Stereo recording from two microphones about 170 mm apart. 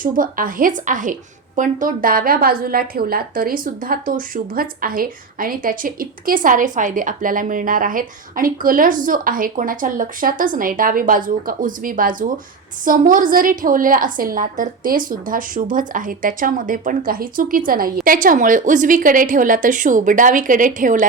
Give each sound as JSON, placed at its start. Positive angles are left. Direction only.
{"t": 0.0, "sound": "a woman's voice", "side_deg": -55}